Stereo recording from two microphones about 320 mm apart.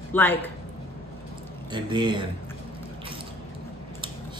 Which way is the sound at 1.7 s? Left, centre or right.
Centre.